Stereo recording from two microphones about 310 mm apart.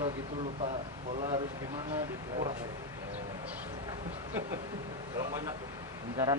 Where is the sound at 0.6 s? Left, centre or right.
Centre.